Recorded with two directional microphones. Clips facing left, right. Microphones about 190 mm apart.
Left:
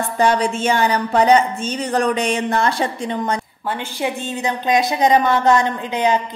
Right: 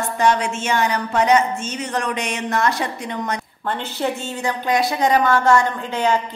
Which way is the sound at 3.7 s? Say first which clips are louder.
Even; 10° left (ahead or behind).